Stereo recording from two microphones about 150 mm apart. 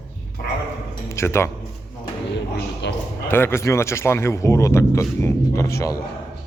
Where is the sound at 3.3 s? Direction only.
15° left (ahead or behind).